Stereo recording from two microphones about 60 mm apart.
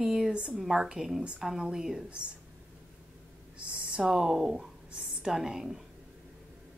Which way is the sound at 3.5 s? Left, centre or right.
Centre.